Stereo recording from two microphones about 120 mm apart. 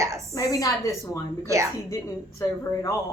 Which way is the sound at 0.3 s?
30° left (ahead or behind).